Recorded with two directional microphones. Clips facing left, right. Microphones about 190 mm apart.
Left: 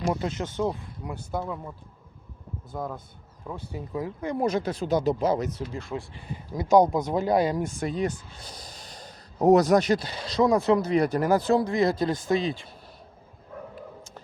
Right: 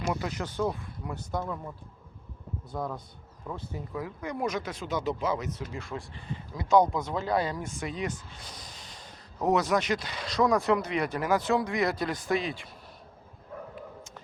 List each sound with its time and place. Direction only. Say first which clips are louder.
0.0 s speech: left 4 dB; 25° left (ahead or behind)
1.1 s speech: left 2 dB; 10° left (ahead or behind)
2.7 s a man's voice: left 1 dB; 5° left (ahead or behind); by 5.6 s 40° left (ahead or behind)
5.9 s speech: left 5 dB; 15° left (ahead or behind)
6.6 s speech: left 4 dB; 40° left (ahead or behind)
7.2 s speech: left 6 dB; 15° left (ahead or behind)
7.5 s speech: left 7 dB; 35° left (ahead or behind)